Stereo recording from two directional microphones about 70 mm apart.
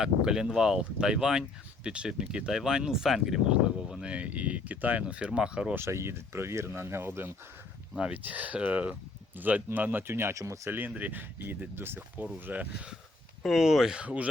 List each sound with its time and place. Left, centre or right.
0.0 s speech: centre
5.7 s speech: right
7.9 s speech: centre; by 10.7 s right
10.7 s speech: right
13.4 s speech: centre